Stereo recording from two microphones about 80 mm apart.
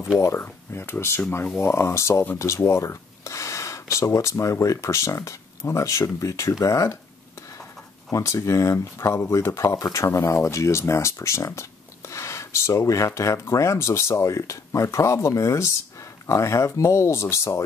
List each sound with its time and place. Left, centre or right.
0.2 s speech: left
8.1 s speech: left